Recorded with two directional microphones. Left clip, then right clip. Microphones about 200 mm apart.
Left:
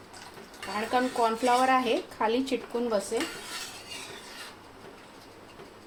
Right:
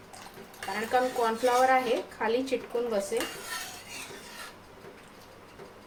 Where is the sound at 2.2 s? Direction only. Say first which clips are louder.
Left 1 dB; 30° left (ahead or behind).